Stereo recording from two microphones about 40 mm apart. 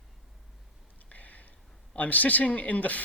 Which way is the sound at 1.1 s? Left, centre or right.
Left.